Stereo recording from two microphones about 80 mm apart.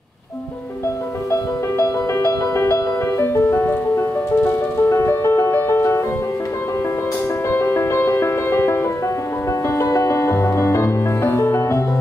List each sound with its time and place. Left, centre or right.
1.3 s music: left
7.4 s music: left